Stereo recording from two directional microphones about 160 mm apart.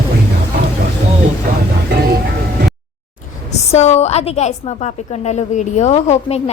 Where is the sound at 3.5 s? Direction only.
45° left (ahead or behind).